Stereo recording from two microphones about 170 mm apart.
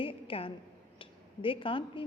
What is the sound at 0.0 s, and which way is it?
A woman's voice, 30° left (ahead or behind).